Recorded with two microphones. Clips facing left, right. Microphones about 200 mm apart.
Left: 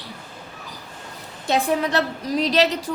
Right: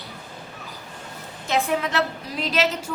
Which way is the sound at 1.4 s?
35° left (ahead or behind).